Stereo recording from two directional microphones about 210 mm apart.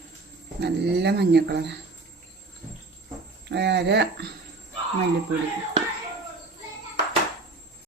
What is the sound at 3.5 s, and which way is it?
Speech, 55° right (ahead or behind).